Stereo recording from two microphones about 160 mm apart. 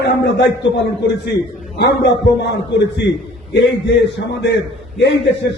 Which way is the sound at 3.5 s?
90° left.